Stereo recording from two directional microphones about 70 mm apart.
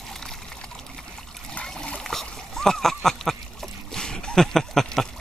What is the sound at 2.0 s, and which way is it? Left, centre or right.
Splash, centre.